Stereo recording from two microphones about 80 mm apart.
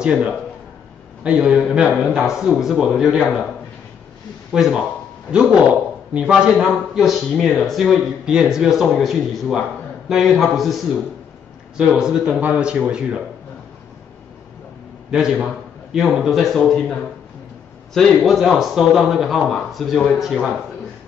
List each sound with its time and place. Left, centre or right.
0.0 s a man's voice: centre
4.5 s a man's voice: centre
15.1 s a man's voice: centre
16.5 s speech: centre
17.9 s speech: centre